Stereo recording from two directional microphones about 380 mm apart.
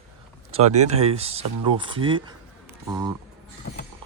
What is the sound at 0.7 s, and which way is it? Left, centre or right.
Speech, centre.